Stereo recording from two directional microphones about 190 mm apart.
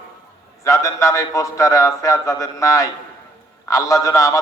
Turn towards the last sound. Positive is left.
turn(degrees=15)  # may be behind; listen again after turning